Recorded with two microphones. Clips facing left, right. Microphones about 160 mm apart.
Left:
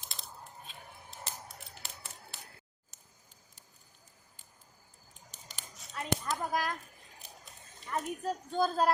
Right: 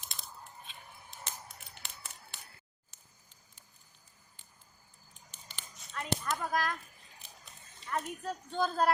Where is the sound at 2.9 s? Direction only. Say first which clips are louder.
Left 1 dB; 45° left (ahead or behind).